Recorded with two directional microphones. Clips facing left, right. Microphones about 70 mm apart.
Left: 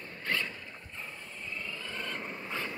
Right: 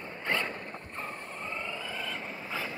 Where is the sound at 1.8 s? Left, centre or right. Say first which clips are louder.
Right 1 dB; centre.